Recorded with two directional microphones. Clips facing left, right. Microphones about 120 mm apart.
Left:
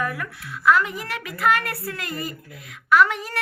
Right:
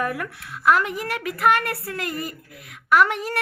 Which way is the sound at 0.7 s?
60° right (ahead or behind).